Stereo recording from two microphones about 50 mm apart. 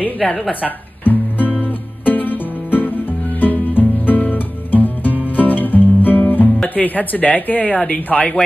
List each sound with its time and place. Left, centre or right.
0.0 s music: left
6.7 s speech: left